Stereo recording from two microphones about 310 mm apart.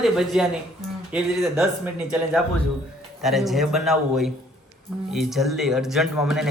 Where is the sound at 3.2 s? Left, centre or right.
Centre.